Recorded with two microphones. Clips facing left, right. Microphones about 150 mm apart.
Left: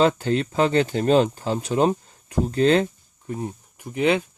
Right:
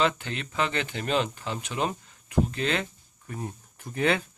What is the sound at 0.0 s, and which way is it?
Speech, 35° left (ahead or behind).